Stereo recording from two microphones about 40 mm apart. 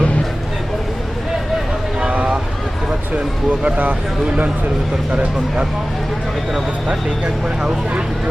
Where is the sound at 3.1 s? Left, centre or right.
Right.